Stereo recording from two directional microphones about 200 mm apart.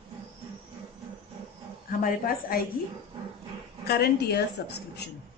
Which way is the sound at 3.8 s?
50° left (ahead or behind).